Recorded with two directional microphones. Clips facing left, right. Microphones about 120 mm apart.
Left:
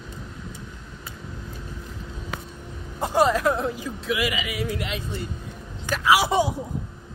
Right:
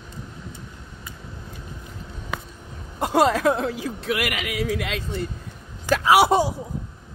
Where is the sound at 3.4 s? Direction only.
90° right.